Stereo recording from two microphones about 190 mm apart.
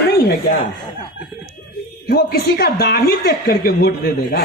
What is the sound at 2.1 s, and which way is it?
A woman's voice, 55° left (ahead or behind).